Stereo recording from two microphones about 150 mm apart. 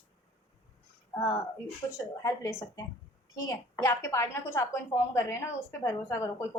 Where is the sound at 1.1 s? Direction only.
20° left (ahead or behind).